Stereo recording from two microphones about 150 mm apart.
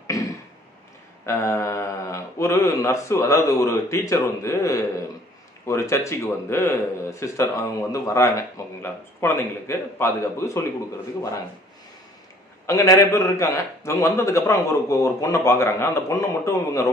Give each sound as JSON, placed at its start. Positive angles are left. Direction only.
{"t": 0.1, "sound": "throat clearing", "side_deg": 25}
{"t": 1.2, "sound": "a man's voice", "side_deg": 15}
{"t": 12.6, "sound": "a man's voice", "side_deg": 20}